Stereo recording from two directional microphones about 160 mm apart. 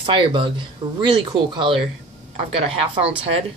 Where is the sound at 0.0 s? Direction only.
30° right (ahead or behind).